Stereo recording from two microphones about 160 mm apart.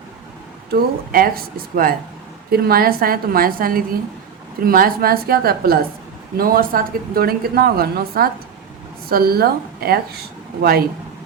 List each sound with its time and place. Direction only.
0.7 s speech: 70° right (ahead or behind)